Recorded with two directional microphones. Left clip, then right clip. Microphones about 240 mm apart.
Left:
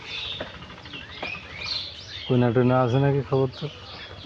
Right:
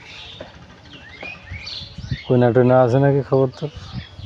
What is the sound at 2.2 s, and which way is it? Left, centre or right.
Speech, right.